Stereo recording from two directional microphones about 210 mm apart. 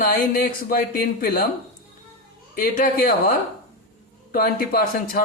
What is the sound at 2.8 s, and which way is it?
Speech, 40° left (ahead or behind).